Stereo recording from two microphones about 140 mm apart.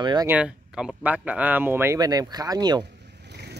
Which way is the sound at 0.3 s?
5° right (ahead or behind).